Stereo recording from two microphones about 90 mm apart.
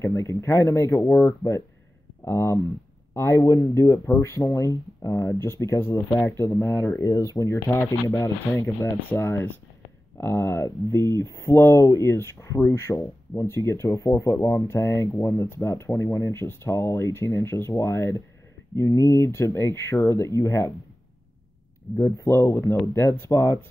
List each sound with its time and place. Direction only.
0.0 s speech: 30° left (ahead or behind)
4.0 s speech: 30° left (ahead or behind)
7.0 s speech: 40° left (ahead or behind)
21.9 s speech: 30° left (ahead or behind)